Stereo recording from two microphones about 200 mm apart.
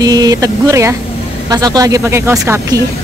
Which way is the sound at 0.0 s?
20° right (ahead or behind).